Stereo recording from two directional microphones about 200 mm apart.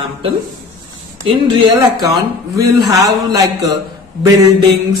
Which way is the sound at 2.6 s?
20° right (ahead or behind).